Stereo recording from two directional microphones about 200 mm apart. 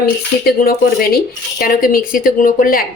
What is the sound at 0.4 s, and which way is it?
Speech, 50° left (ahead or behind).